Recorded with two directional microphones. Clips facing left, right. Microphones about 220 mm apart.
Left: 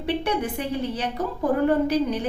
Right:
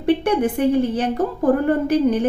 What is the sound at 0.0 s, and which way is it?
A woman's voice, 50° right (ahead or behind).